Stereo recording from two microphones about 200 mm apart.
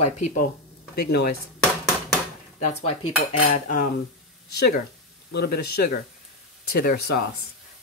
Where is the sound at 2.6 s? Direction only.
30° left (ahead or behind).